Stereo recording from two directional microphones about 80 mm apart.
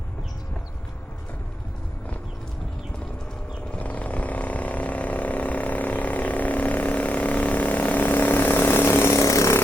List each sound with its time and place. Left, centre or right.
3.8 s vehicle: centre; by 9.6 s left